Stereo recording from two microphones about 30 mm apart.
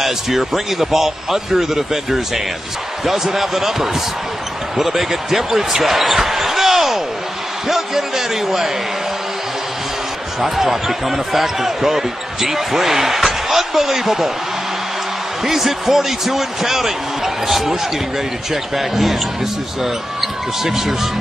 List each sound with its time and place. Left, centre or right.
0.0 s speech: centre
10.4 s speech: centre
15.4 s speech: centre